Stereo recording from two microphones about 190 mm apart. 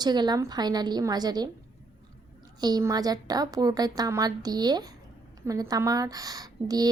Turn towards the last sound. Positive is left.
turn(degrees=-20)  # may be behind; listen again after turning